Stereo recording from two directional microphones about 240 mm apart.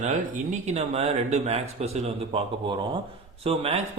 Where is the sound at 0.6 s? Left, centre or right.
Right.